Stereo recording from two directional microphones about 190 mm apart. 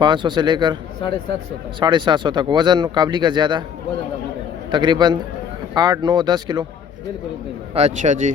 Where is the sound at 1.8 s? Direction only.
25° right (ahead or behind).